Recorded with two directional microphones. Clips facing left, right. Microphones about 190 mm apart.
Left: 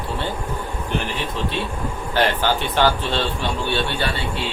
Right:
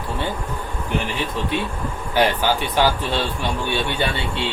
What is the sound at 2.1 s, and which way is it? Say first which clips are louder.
Speech: right 1 dB; 10° right (ahead or behind).